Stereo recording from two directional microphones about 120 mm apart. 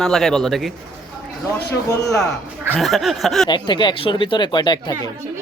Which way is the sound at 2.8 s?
Centre (ahead or behind).